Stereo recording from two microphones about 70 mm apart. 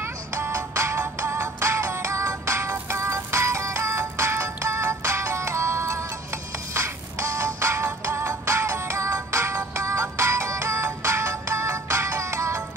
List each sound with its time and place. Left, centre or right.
0.0 s music: right